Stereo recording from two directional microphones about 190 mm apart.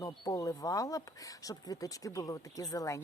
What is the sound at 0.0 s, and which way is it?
Speech, 20° left (ahead or behind).